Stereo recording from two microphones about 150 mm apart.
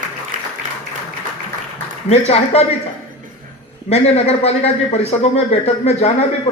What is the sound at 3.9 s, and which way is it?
A man's voice, 45° left (ahead or behind).